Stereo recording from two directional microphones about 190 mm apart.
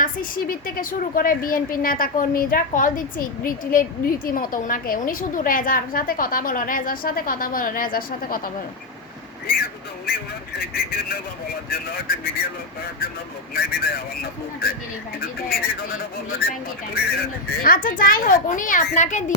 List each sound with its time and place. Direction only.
0.0 s a woman's voice: 45° left (ahead or behind)
11.7 s a woman's voice: 50° left (ahead or behind)
13.5 s a woman's voice: 50° left (ahead or behind)